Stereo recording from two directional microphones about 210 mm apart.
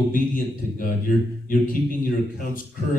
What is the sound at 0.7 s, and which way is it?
A man's voice, 40° left (ahead or behind).